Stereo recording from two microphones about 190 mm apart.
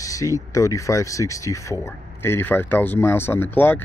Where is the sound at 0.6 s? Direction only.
15° left (ahead or behind).